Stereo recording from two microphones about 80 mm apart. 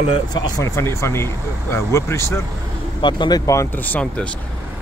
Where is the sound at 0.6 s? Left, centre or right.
Left.